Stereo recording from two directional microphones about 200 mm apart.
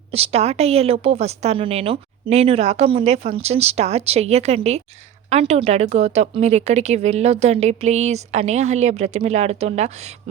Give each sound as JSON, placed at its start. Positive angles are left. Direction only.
{"t": 0.1, "sound": "speech", "side_deg": -30}